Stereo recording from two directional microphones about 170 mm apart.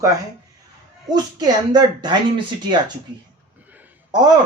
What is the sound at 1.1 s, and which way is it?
Speech, 25° right (ahead or behind).